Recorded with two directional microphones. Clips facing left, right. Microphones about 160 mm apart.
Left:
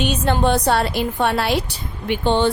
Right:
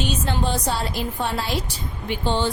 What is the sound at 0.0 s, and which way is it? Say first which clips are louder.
A woman's voice: left 6 dB; 60° left (ahead or behind).